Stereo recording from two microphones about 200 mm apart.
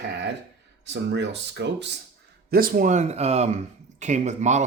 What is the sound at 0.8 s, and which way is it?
Speech, 60° right (ahead or behind).